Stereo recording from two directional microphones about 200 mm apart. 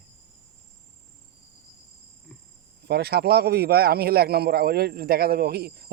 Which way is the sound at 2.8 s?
55° right (ahead or behind).